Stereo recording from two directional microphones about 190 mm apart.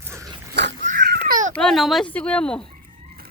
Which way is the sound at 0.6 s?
65° right (ahead or behind).